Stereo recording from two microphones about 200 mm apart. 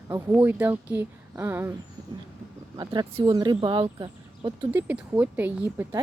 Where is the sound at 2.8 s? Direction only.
20° right (ahead or behind).